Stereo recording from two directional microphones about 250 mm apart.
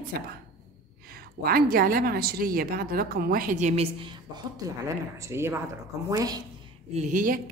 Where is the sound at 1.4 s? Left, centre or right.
Right; by 6.4 s centre.